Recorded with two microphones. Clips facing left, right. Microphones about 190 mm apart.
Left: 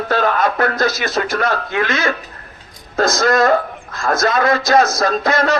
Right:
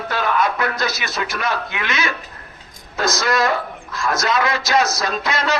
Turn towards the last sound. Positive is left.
turn(degrees=50)  # may be behind; listen again after turning